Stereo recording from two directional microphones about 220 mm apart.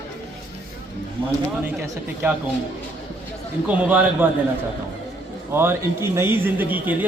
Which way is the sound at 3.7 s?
5° right (ahead or behind).